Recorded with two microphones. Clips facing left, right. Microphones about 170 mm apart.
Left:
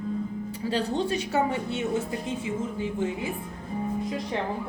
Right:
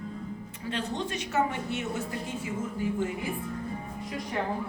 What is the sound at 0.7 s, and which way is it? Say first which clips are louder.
Speech: left 6 dB; 35° left (ahead or behind).